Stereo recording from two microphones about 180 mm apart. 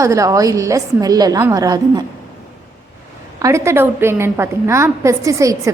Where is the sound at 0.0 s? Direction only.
20° right (ahead or behind).